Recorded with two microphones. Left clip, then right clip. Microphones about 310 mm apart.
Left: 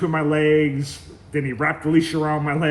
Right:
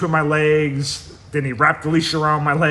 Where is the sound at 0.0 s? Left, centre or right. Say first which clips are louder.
Right 3 dB; centre.